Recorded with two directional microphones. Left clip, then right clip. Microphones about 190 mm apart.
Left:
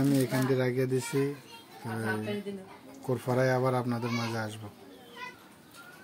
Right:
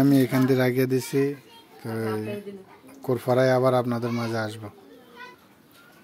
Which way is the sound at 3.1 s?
45° right (ahead or behind).